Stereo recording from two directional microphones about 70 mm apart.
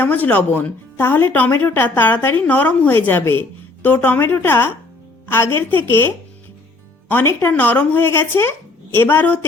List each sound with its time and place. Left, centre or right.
0.0 s a woman's voice: left
4.4 s a woman's voice: left
7.1 s a woman's voice: left
7.5 s a woman's voice: left